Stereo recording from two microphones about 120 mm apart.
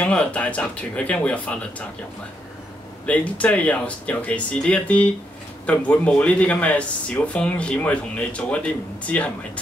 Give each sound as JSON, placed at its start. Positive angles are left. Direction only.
{"t": 0.0, "sound": "speech", "side_deg": 10}
{"t": 3.1, "sound": "speech", "side_deg": 10}